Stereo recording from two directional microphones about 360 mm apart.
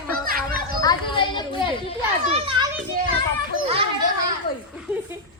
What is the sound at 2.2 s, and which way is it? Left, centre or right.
Speech, centre.